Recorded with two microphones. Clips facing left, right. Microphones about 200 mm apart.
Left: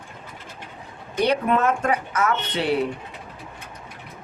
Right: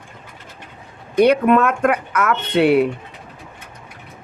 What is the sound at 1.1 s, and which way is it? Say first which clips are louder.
Speech: right 8 dB; 55° right (ahead or behind).